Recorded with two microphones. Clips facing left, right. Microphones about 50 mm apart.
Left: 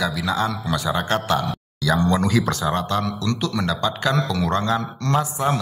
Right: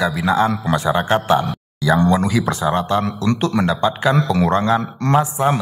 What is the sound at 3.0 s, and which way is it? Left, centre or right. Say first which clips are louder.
A man's voice: right 5 dB; right.